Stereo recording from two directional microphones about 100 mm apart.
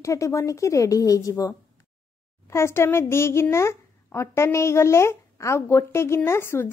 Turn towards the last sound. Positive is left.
turn(degrees=25)  # may be behind; listen again after turning